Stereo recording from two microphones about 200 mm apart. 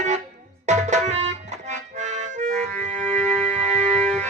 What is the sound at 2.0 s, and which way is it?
Accordion, 35° right (ahead or behind).